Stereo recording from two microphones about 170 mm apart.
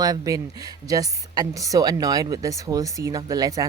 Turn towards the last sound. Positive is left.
turn(degrees=-20)  # may be behind; listen again after turning